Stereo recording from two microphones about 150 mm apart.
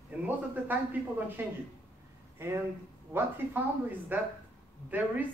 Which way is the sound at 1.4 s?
15° right (ahead or behind).